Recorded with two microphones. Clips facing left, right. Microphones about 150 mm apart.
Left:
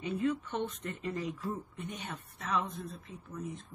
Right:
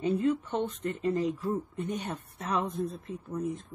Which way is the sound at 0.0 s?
30° right (ahead or behind).